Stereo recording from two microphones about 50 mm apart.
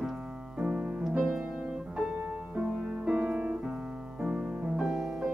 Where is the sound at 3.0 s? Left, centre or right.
Centre.